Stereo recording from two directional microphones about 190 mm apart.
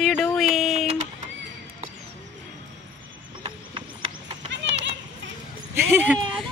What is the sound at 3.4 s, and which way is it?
Clip-clop, 30° right (ahead or behind).